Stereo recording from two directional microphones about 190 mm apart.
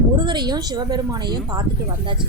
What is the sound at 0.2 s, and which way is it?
Speech, 25° right (ahead or behind).